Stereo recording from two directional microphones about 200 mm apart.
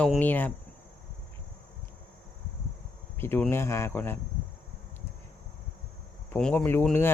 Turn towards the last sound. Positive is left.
turn(degrees=10)  # may be behind; listen again after turning